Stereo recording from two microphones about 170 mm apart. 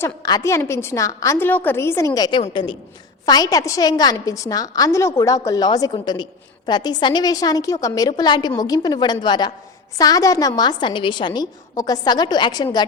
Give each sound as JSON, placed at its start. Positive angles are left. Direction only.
{"t": 0.0, "sound": "a woman's voice", "side_deg": 20}